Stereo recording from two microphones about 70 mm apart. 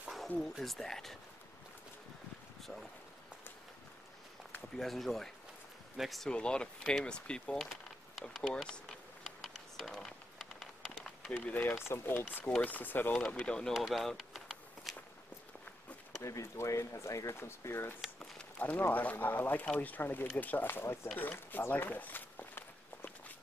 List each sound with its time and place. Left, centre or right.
0.4 s speech: centre
2.6 s speech: centre
4.7 s speech: centre
6.3 s speech: centre
8.4 s a sound: centre
11.4 s speech: left
13.3 s speech: centre
13.7 s a sound: centre
16.2 s speech: left
17.4 s speech: left
21.2 s walk: left